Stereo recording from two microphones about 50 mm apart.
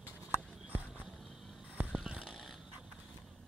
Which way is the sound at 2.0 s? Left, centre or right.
Centre.